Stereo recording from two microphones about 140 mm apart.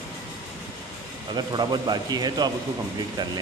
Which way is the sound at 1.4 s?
30° right (ahead or behind).